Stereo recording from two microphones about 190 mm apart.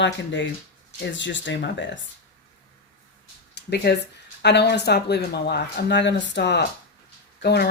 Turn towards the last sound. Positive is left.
turn(degrees=60)  # may be behind; listen again after turning